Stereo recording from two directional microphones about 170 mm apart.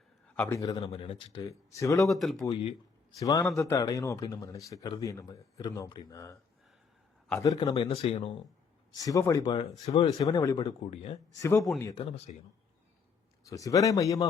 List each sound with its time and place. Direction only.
0.3 s a man's voice: 10° left (ahead or behind)
0.6 s speech: 25° left (ahead or behind)
1.5 s speech: 20° left (ahead or behind)
2.0 s speech: centre (ahead or behind)
3.2 s speech: 20° left (ahead or behind)
9.0 s speech: 20° left (ahead or behind)
9.8 s speech: 35° left (ahead or behind)
10.2 s speech: 20° left (ahead or behind)
10.8 s speech: 35° left (ahead or behind)
11.3 s speech: 15° left (ahead or behind)
12.1 s speech: 40° left (ahead or behind)
13.5 s speech: 20° left (ahead or behind)